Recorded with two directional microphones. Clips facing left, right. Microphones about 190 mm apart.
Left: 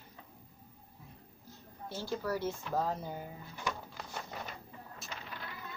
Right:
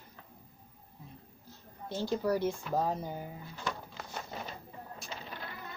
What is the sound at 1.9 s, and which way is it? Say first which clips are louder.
A woman's voice: right 5 dB; 15° right (ahead or behind).